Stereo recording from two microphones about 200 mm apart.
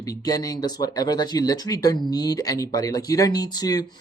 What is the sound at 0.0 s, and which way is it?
Speech, 20° left (ahead or behind).